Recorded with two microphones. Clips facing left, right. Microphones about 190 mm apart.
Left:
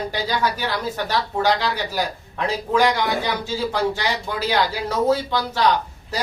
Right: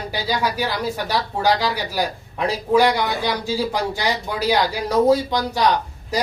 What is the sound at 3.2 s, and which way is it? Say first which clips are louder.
Speech: right 2 dB; 35° right (ahead or behind).